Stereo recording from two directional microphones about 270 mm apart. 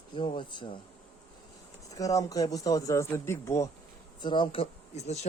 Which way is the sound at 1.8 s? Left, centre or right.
Centre.